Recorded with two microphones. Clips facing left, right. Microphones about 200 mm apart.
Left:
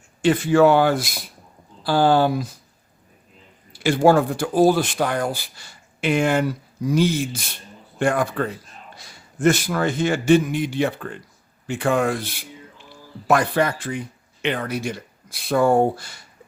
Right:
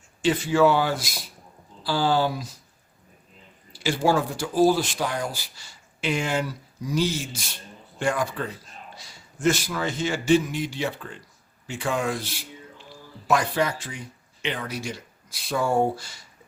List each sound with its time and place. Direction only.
0.2 s a man's voice: 55° left (ahead or behind)
3.7 s a man's voice: 55° left (ahead or behind)